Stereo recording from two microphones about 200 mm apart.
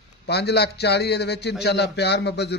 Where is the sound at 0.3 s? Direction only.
55° left (ahead or behind).